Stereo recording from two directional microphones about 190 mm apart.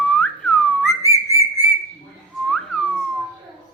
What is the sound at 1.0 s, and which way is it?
Whistling, 15° left (ahead or behind).